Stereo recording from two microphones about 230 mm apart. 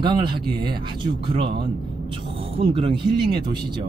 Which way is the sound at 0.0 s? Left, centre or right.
Centre.